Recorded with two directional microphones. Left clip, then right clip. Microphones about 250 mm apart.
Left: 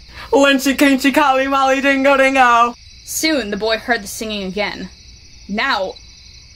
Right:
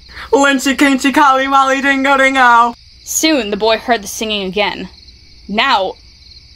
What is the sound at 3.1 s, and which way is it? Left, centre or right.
Music, centre.